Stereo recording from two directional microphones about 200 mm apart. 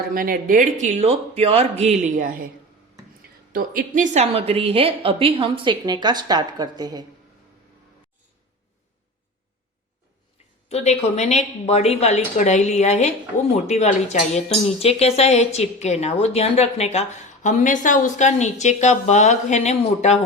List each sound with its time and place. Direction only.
0.1 s speech: 45° right (ahead or behind)
3.5 s a woman's voice: 45° right (ahead or behind); by 7.0 s 20° right (ahead or behind)
10.7 s speech: 30° left (ahead or behind)